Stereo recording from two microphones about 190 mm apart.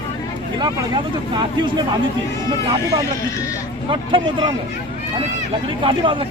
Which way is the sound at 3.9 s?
25° right (ahead or behind).